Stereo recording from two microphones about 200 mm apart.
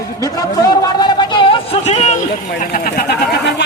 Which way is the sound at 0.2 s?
15° left (ahead or behind).